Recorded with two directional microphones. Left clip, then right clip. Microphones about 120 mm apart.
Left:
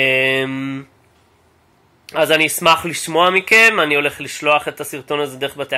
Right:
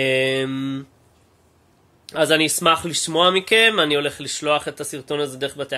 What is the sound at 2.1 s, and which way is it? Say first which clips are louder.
Speech: left 3 dB; 45° right (ahead or behind).